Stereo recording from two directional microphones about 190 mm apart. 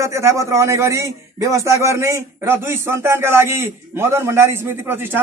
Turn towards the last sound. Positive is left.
turn(degrees=-10)  # may be behind; listen again after turning